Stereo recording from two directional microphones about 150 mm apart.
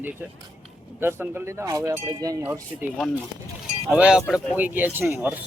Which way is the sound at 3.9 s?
10° right (ahead or behind).